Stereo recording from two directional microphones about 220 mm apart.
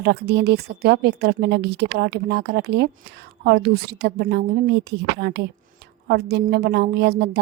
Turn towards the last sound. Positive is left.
turn(degrees=-45)  # may be behind; listen again after turning